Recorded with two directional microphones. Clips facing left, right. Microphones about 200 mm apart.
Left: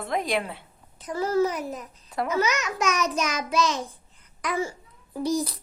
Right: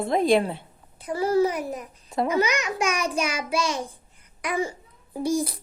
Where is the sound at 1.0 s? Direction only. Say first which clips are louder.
Right 2 dB; 10° right (ahead or behind).